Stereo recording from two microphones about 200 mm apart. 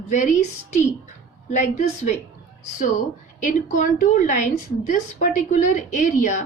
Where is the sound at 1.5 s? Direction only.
35° left (ahead or behind).